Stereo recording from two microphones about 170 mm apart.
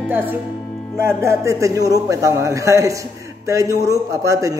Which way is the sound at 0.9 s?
15° right (ahead or behind).